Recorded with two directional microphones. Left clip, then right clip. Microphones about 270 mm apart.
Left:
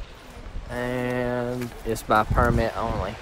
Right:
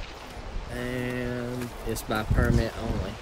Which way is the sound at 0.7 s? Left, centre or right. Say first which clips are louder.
Left 5 dB; left.